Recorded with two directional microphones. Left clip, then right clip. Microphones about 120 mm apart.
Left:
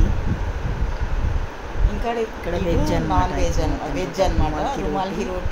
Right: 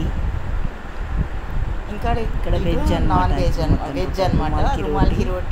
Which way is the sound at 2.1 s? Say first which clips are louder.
Even; 25° right (ahead or behind).